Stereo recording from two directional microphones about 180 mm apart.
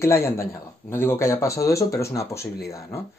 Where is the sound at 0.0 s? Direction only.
15° left (ahead or behind).